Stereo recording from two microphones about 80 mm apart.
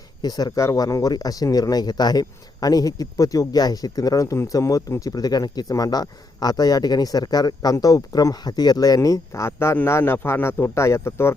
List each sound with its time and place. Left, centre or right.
0.2 s speech: left
0.6 s speech: left